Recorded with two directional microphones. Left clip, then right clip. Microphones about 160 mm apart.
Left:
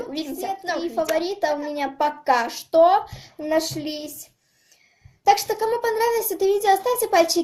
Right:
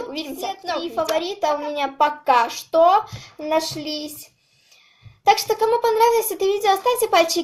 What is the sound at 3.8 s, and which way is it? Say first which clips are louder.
Speech: right 2 dB; 50° left (ahead or behind).